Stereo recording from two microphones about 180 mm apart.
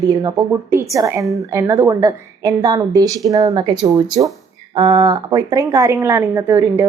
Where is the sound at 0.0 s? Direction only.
20° right (ahead or behind).